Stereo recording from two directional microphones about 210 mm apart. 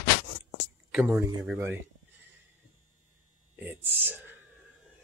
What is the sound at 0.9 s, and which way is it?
Speech, 5° right (ahead or behind).